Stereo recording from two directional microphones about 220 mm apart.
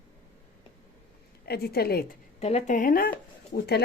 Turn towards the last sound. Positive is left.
turn(degrees=45)  # may be behind; listen again after turning